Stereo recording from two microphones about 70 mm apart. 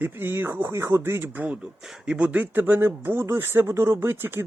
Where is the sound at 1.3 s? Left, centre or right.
Right.